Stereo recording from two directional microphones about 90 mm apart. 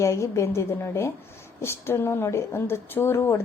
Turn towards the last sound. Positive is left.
turn(degrees=30)  # may be behind; listen again after turning